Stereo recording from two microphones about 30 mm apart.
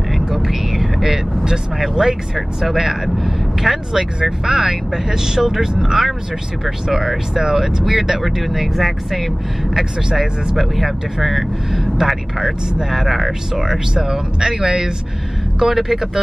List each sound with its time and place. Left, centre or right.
0.3 s a sound: centre
1.4 s speech: centre
6.6 s speech: centre
12.9 s speech: centre
13.6 s speech: centre
15.6 s speech: centre